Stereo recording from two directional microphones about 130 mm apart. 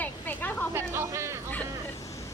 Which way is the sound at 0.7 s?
20° right (ahead or behind).